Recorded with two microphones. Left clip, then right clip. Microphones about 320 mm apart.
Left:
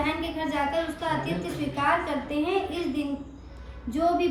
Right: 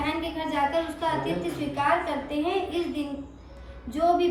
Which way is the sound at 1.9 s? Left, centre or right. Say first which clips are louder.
Even; centre.